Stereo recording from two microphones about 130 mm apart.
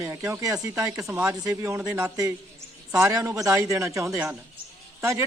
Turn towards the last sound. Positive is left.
turn(degrees=-20)  # may be behind; listen again after turning